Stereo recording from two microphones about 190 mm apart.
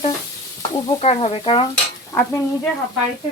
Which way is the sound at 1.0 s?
30° left (ahead or behind).